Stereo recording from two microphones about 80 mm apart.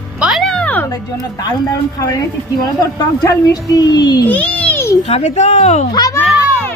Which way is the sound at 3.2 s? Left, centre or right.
Left.